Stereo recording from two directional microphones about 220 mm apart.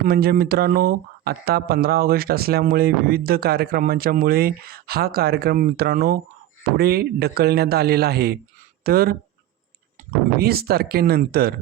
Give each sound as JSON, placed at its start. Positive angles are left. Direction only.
{"t": 0.0, "sound": "speech", "side_deg": -45}
{"t": 10.3, "sound": "speech", "side_deg": -45}